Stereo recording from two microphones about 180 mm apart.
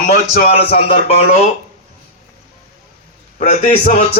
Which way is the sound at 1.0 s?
35° left (ahead or behind).